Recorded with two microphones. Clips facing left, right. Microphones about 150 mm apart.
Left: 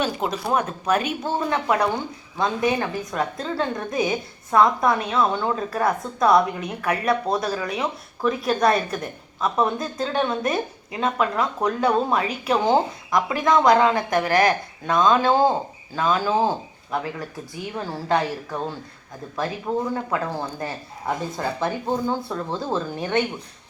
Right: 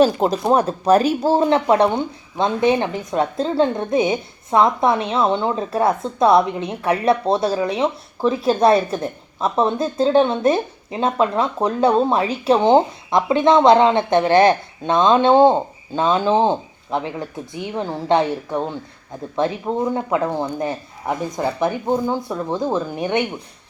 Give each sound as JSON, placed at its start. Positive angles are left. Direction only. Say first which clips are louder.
{"t": 0.0, "sound": "a woman's voice", "louder": "right 9 dB", "side_deg": -35}